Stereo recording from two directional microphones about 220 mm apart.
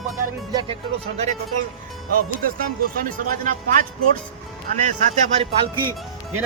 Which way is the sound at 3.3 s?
40° right (ahead or behind).